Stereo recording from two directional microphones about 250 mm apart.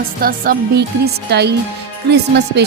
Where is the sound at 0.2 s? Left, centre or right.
Right.